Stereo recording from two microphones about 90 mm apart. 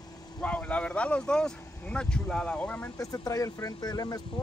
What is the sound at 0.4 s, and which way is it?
Speech, 15° left (ahead or behind).